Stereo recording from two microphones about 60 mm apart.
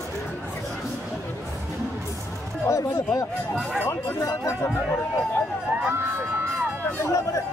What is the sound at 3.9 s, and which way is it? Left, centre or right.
Chatter, left.